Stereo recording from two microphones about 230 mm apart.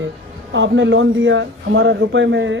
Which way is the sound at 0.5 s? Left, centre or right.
Right.